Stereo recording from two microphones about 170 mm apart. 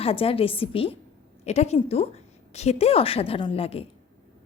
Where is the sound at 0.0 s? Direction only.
35° left (ahead or behind).